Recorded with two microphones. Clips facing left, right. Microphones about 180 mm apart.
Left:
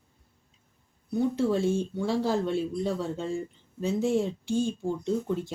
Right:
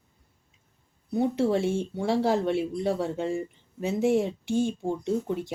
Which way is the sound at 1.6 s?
25° right (ahead or behind).